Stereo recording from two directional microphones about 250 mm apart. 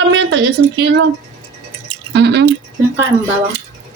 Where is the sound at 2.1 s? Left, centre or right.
Right.